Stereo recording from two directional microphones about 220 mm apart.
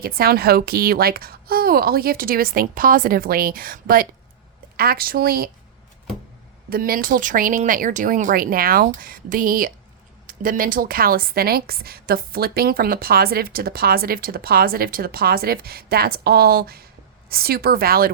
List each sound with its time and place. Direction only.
0.0 s a woman's voice: 45° right (ahead or behind)
6.7 s a woman's voice: 45° right (ahead or behind)